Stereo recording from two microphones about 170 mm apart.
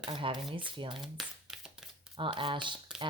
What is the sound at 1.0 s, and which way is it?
Shuffling cards, centre (ahead or behind).